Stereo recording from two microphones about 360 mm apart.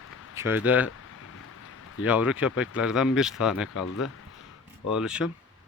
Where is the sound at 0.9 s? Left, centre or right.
Left.